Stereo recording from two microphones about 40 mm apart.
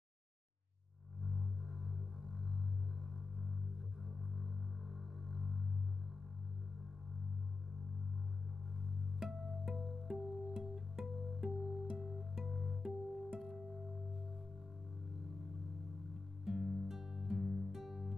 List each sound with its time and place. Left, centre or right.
1.2 s music: centre
4.9 s a sound: centre
9.2 s music: centre
16.4 s music: centre